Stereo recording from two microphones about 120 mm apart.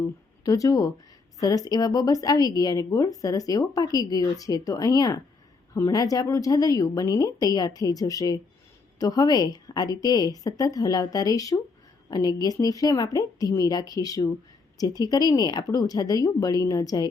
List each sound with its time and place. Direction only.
0.4 s a woman's voice: 30° left (ahead or behind)